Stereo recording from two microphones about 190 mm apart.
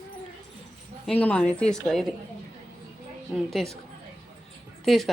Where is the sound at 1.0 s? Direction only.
5° left (ahead or behind).